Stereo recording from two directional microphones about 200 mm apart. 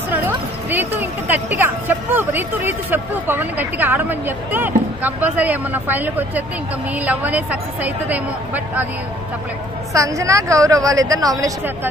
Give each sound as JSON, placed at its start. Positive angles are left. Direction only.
{"t": 0.1, "sound": "a sound", "side_deg": -10}
{"t": 1.6, "sound": "speech", "side_deg": -10}
{"t": 9.9, "sound": "speech", "side_deg": -15}